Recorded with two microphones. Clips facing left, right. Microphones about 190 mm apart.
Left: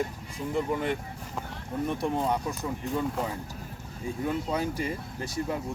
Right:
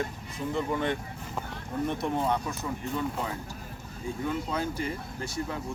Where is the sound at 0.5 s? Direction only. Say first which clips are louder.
Left 1 dB; 10° left (ahead or behind).